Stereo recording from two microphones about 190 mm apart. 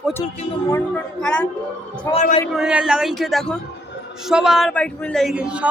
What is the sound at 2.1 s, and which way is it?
Speech, 35° left (ahead or behind).